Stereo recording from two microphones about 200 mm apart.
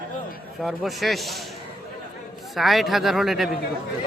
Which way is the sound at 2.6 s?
Centre (ahead or behind).